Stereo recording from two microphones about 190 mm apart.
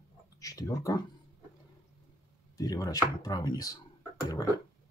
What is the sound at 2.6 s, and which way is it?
Speech, 20° left (ahead or behind).